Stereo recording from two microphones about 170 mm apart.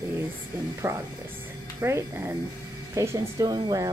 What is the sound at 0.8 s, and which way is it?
Speech, 15° right (ahead or behind).